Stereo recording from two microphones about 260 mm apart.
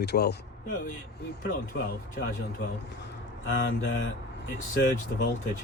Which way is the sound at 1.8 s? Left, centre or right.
Left.